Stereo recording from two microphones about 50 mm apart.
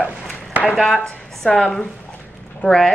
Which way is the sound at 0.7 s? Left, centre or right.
Centre.